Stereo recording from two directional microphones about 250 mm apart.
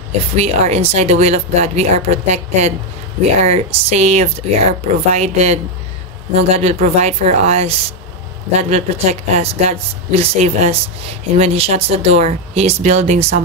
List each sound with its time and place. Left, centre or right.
0.4 s speech: right